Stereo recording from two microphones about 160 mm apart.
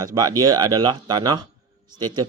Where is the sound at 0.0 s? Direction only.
20° right (ahead or behind).